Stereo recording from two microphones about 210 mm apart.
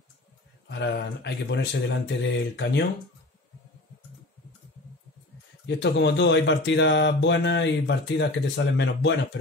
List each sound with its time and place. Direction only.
0.7 s speech: 55° left (ahead or behind)
5.7 s speech: 55° left (ahead or behind)